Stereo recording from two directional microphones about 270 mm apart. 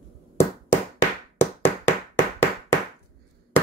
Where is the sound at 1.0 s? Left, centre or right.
Centre.